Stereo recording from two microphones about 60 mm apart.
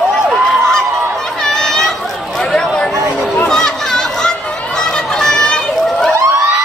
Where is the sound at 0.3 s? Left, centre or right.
Centre.